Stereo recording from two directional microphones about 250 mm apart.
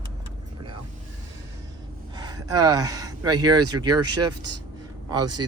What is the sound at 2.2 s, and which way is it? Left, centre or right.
Speech, centre.